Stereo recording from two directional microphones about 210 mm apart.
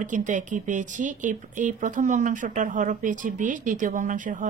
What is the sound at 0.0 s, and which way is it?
Speech, 35° right (ahead or behind).